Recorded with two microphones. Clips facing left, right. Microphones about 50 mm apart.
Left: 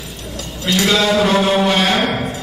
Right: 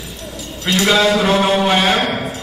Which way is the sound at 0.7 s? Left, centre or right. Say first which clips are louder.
Right 1 dB; centre.